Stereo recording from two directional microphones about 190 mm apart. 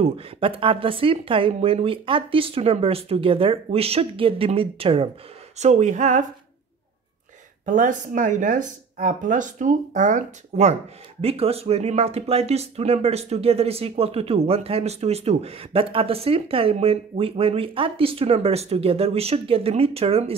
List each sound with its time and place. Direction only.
0.0 s speech: 30° right (ahead or behind)
7.6 s speech: 40° right (ahead or behind)